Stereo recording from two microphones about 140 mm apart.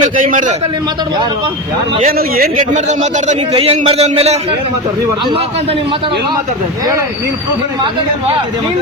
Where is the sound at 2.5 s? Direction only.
60° right (ahead or behind).